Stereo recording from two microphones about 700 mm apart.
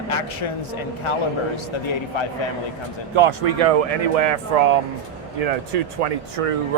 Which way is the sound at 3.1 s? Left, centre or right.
Right.